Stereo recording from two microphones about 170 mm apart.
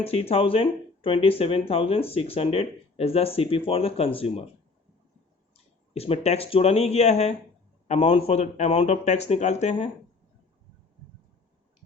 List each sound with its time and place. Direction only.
0.0 s speech: 35° left (ahead or behind)
5.9 s speech: 35° left (ahead or behind)